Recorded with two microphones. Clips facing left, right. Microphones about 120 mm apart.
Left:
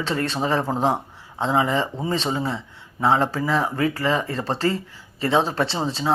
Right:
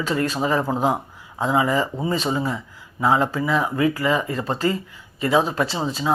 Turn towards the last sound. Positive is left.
turn(degrees=35)  # may be behind; listen again after turning